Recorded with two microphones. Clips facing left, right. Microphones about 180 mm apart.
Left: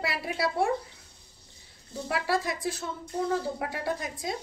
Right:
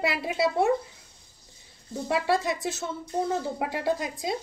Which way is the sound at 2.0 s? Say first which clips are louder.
Right 3 dB; 25° right (ahead or behind).